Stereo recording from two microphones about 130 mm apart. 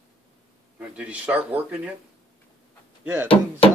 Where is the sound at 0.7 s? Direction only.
10° right (ahead or behind).